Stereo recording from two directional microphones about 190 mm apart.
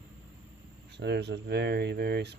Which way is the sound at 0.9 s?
65° right (ahead or behind).